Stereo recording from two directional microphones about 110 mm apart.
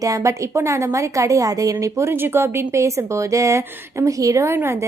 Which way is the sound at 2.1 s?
20° right (ahead or behind).